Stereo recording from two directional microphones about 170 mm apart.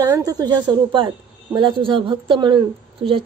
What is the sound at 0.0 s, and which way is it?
Speech, 20° right (ahead or behind).